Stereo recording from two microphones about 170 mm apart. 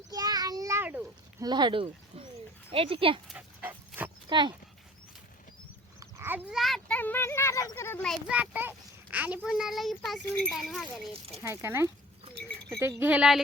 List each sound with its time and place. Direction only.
0.1 s a sound: 20° right (ahead or behind)
1.5 s speech: 25° right (ahead or behind)
3.2 s dog: 10° right (ahead or behind)
4.3 s speech: 25° right (ahead or behind)
6.0 s a child's voice: 15° right (ahead or behind); by 8.2 s 5° left (ahead or behind)
8.3 s a child's voice: 10° right (ahead or behind)
11.3 s speech: 15° right (ahead or behind)
13.0 s speech: 10° right (ahead or behind)